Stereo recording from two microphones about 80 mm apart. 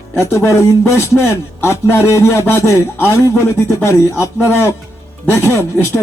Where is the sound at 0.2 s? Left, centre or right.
Left.